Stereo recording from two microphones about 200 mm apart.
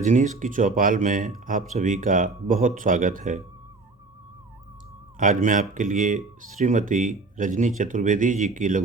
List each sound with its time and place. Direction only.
0.0 s speech: 35° right (ahead or behind)
5.1 s speech: 40° right (ahead or behind)